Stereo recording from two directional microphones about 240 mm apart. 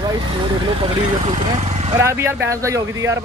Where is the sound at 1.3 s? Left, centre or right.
Right.